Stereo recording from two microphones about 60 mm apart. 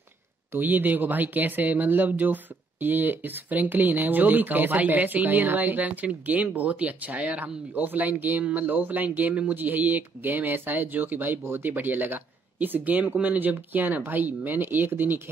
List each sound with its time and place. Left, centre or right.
0.5 s speech: right